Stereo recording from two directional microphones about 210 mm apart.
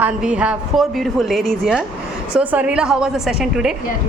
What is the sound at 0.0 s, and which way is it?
A woman's voice, 5° right (ahead or behind).